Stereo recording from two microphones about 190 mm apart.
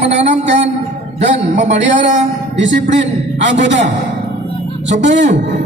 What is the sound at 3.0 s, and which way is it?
Speech, 70° right (ahead or behind).